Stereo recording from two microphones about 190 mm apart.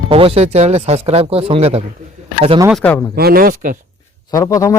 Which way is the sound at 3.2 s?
50° right (ahead or behind).